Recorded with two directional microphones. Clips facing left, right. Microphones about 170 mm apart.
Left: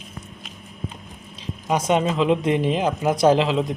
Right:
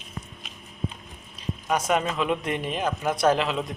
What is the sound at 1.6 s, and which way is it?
Speech, 20° left (ahead or behind).